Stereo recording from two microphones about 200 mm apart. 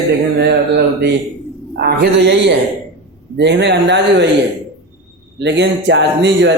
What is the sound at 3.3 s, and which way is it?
Speech, 60° right (ahead or behind).